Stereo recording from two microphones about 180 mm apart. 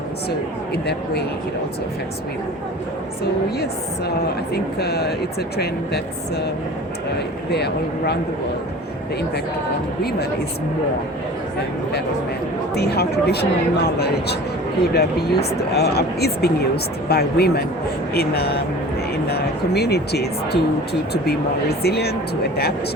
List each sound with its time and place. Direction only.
0.3 s speech: 65° left (ahead or behind)
4.5 s speech: 60° left (ahead or behind)
7.5 s speech: 65° left (ahead or behind)
10.0 s speech: 60° left (ahead or behind)
12.7 s speech: 65° left (ahead or behind)